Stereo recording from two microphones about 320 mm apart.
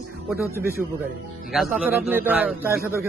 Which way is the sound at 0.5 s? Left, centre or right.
Centre.